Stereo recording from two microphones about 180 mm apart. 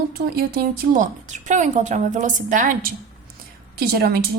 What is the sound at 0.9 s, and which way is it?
A woman's voice, 45° right (ahead or behind).